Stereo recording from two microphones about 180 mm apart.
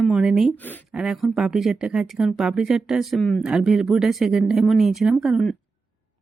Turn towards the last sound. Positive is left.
turn(degrees=0)  # may be behind; listen again after turning